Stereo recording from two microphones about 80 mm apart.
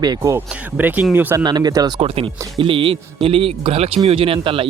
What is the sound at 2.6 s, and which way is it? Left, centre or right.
Speech, right.